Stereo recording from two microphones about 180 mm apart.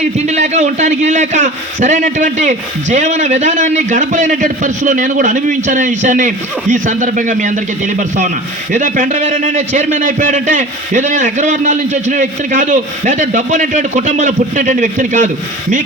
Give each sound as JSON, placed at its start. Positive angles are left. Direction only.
{"t": 0.3, "sound": "a man's voice", "side_deg": -40}